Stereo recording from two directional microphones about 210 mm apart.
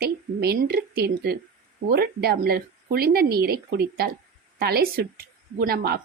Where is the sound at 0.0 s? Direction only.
50° right (ahead or behind).